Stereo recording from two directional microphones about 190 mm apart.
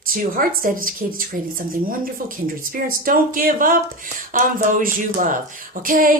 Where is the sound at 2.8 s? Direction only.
45° right (ahead or behind).